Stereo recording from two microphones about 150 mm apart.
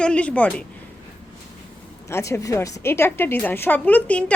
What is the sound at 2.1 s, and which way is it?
A woman's voice, 20° left (ahead or behind).